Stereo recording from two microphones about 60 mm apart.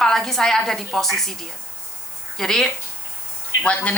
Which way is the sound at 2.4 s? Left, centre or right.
Centre.